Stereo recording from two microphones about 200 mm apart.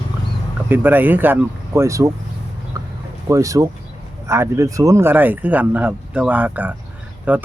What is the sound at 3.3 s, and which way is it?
Speech, 15° right (ahead or behind).